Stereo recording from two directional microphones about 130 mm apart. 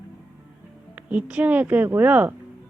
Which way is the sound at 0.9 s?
10° right (ahead or behind).